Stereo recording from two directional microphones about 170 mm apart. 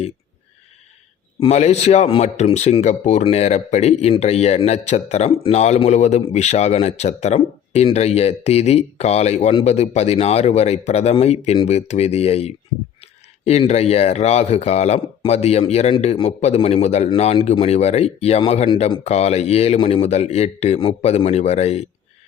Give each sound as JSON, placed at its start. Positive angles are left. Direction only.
{"t": 1.4, "sound": "a man's voice", "side_deg": 40}